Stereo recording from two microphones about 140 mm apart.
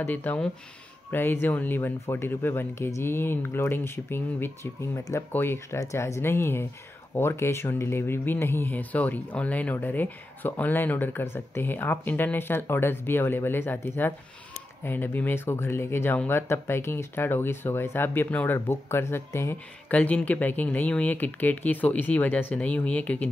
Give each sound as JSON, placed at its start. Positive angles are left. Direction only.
{"t": 0.0, "sound": "speech", "side_deg": 10}